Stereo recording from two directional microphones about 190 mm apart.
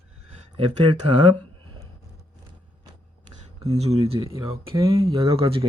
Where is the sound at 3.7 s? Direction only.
35° right (ahead or behind).